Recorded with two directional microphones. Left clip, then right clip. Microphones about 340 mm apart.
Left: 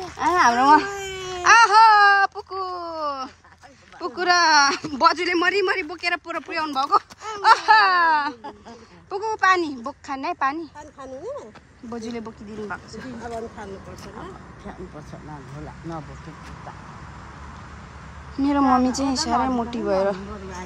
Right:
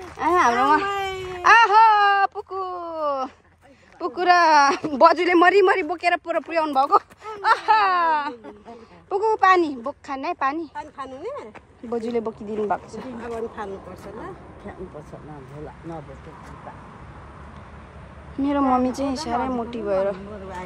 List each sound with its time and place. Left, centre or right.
0.2 s speech: centre
1.4 s a sound: centre
4.0 s speech: centre
11.0 s a woman's voice: right
11.9 s speech: centre
18.4 s speech: centre